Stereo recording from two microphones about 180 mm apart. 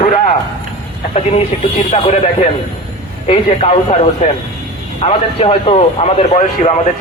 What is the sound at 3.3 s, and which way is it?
A man's voice, 35° left (ahead or behind).